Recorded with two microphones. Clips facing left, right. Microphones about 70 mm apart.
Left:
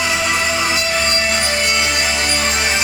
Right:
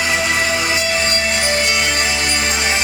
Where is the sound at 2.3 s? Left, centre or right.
Right.